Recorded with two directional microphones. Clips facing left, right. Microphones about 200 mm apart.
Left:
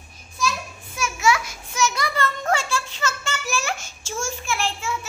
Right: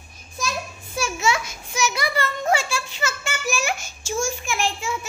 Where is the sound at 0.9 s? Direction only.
30° right (ahead or behind).